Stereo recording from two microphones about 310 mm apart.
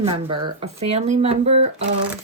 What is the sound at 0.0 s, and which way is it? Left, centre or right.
Speech, centre.